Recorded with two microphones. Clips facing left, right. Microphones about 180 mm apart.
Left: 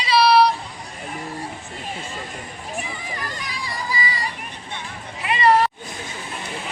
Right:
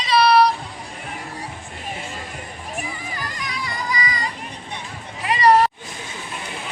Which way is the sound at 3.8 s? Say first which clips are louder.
Right 1 dB; 30° left (ahead or behind).